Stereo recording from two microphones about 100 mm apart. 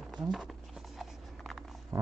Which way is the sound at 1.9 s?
35° right (ahead or behind).